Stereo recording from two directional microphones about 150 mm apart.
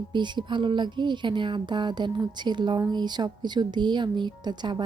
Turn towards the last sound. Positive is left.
turn(degrees=-30)  # may be behind; listen again after turning